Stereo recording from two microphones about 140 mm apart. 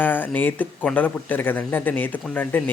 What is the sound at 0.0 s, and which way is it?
Speech, 15° left (ahead or behind).